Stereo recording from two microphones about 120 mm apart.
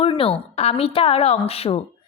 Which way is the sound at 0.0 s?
50° left (ahead or behind).